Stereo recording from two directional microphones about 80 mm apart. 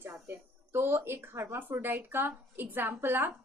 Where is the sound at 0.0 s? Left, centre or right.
Right.